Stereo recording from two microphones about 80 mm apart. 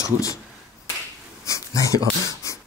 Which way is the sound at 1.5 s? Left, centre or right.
Left.